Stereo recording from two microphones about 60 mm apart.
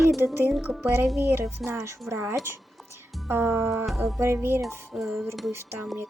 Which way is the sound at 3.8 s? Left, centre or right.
Centre.